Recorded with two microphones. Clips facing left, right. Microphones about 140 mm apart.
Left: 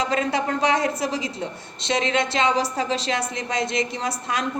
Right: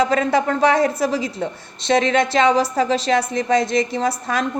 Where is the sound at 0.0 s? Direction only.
40° right (ahead or behind).